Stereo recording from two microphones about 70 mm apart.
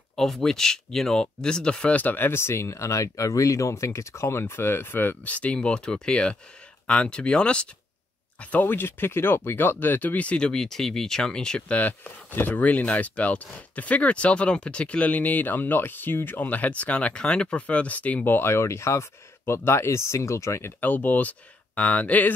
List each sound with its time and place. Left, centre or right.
0.1 s speech: centre
11.8 s speech: left
20.8 s speech: left